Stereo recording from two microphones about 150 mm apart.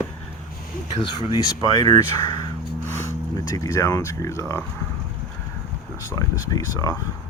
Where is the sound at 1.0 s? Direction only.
30° left (ahead or behind).